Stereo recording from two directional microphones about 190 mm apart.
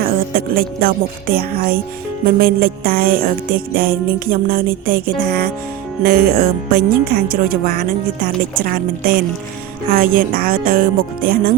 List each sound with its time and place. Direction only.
0.5 s speech: 50° right (ahead or behind)